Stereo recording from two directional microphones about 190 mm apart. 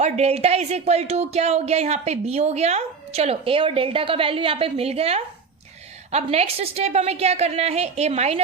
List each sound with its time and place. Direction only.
0.0 s speech: 35° right (ahead or behind)